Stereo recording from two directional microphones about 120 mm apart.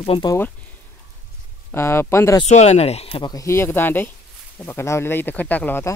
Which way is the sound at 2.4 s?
65° left (ahead or behind).